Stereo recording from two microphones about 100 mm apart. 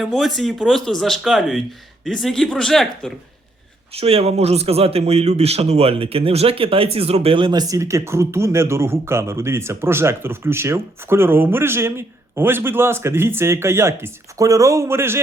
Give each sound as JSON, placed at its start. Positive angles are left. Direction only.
{"t": 0.0, "sound": "speech", "side_deg": 0}
{"t": 3.9, "sound": "speech", "side_deg": -80}
{"t": 7.6, "sound": "speech", "side_deg": -30}